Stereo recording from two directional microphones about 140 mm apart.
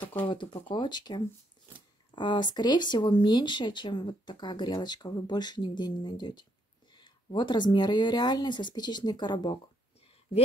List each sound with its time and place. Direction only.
0.2 s speech: 35° left (ahead or behind)